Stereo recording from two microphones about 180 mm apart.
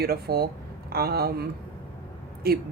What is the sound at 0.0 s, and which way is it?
Speech, 60° right (ahead or behind).